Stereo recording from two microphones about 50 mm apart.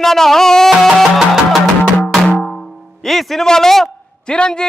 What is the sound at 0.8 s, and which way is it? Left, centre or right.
Music, centre.